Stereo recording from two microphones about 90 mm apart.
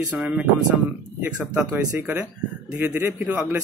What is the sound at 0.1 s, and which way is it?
Speech, 15° right (ahead or behind).